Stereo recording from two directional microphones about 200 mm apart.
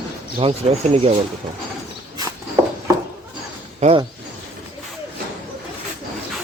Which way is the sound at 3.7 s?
35° right (ahead or behind).